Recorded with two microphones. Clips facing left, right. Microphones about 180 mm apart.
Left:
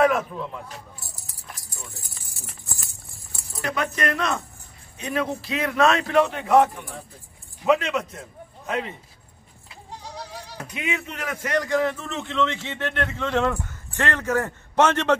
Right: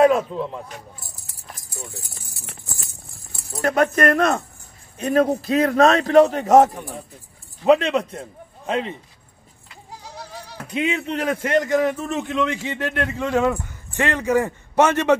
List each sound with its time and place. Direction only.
0.0 s a man's voice: 30° right (ahead or behind)
3.5 s a man's voice: 50° right (ahead or behind)
7.6 s a man's voice: 30° right (ahead or behind)
10.7 s a man's voice: 30° right (ahead or behind); by 15.1 s 10° right (ahead or behind)